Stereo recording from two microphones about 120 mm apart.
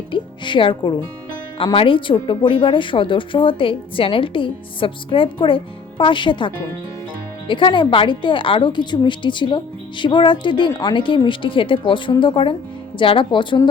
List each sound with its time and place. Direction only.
0.1 s music: 45° left (ahead or behind)
1.5 s a woman's voice: 50° left (ahead or behind)